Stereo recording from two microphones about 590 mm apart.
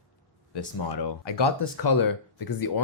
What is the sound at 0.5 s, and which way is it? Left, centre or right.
Speech, left.